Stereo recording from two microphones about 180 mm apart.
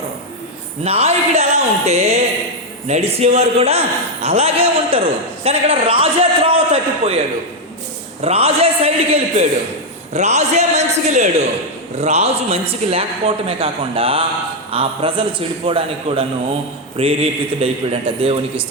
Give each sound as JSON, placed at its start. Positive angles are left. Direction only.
{"t": 0.9, "sound": "speech", "side_deg": -35}
{"t": 8.2, "sound": "speech", "side_deg": -35}